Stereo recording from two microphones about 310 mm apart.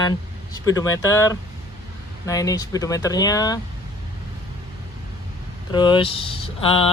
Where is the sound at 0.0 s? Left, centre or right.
Centre.